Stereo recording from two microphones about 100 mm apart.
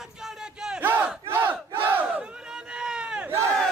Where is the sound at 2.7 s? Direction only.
10° right (ahead or behind).